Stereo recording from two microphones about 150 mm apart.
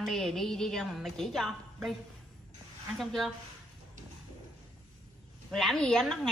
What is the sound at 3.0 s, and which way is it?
Speech, centre (ahead or behind).